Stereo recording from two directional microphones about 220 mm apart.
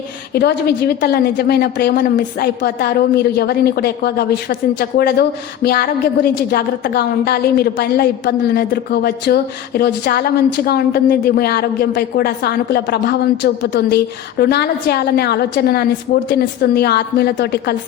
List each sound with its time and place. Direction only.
0.3 s a woman's voice: 45° left (ahead or behind)